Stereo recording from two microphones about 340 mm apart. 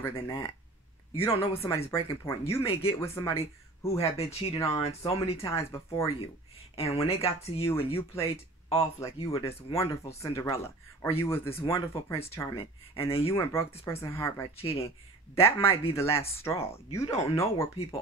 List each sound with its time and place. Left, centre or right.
0.0 s speech: centre